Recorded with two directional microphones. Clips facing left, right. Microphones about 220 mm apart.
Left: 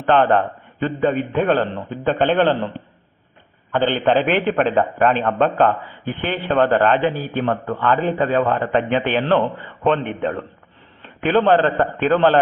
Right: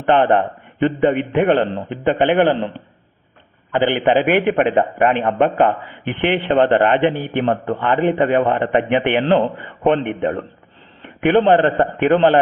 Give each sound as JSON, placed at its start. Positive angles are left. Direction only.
{"t": 0.1, "sound": "a man's voice", "side_deg": -20}